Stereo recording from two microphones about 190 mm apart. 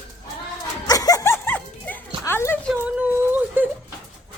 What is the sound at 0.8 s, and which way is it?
Dog, 20° left (ahead or behind).